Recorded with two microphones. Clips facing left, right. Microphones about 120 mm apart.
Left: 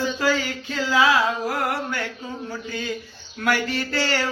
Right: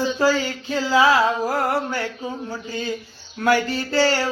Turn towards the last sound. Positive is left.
turn(degrees=-25)  # may be behind; listen again after turning